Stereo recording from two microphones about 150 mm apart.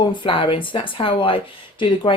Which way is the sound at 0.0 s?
30° left (ahead or behind).